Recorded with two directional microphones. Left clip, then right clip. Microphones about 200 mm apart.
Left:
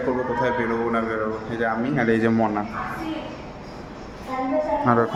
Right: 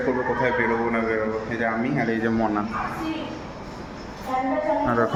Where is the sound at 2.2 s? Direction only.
25° left (ahead or behind).